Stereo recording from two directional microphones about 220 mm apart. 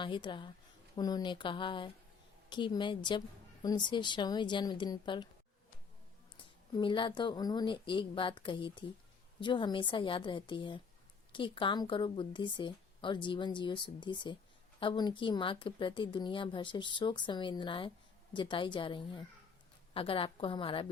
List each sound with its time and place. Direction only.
0.0 s a woman's voice: 20° left (ahead or behind)
6.3 s a woman's voice: 20° left (ahead or behind)